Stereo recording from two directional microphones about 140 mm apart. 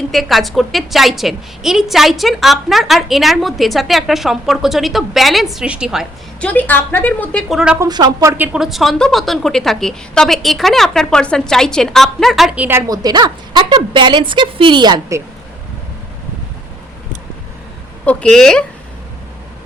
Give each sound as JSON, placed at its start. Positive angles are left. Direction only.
{"t": 0.1, "sound": "a woman's voice", "side_deg": 0}
{"t": 6.4, "sound": "speech", "side_deg": 10}
{"t": 7.5, "sound": "speech", "side_deg": -5}
{"t": 7.8, "sound": "speech", "side_deg": -30}
{"t": 8.4, "sound": "a woman's voice", "side_deg": -5}
{"t": 12.9, "sound": "a woman's voice", "side_deg": -30}
{"t": 18.0, "sound": "a woman's voice", "side_deg": 10}